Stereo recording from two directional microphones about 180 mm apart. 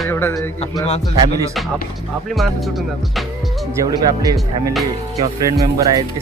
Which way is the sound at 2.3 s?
Centre (ahead or behind).